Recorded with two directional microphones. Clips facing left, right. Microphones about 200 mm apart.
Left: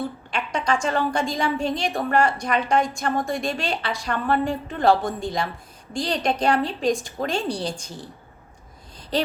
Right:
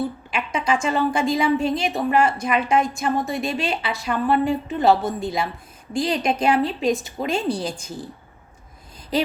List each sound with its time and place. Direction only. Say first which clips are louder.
0.3 s a woman's voice: even; 5° right (ahead or behind)